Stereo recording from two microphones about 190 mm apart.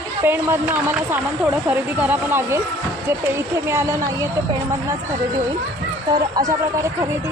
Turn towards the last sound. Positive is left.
turn(degrees=-20)  # may be behind; listen again after turning